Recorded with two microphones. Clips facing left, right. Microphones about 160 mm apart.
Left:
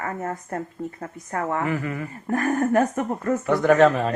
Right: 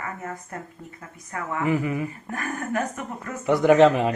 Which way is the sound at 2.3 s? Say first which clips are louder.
Left 12 dB; 50° left (ahead or behind).